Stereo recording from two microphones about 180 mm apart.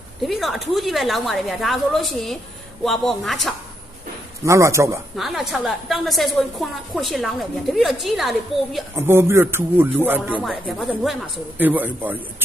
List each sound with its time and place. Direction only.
0.2 s a woman's voice: centre (ahead or behind)
4.4 s a man's voice: 15° right (ahead or behind)
5.1 s a woman's voice: centre (ahead or behind)
9.0 s a man's voice: 15° right (ahead or behind)